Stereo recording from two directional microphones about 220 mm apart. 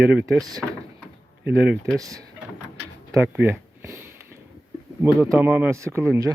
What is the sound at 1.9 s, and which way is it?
Speech, 15° right (ahead or behind).